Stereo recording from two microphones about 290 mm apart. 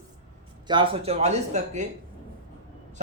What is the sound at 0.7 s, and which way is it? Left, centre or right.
Speech, centre.